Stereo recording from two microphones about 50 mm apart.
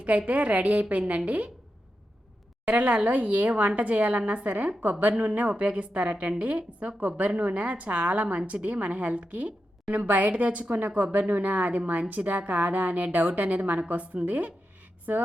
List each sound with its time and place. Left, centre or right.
0.3 s a woman's voice: right
2.6 s a woman's voice: right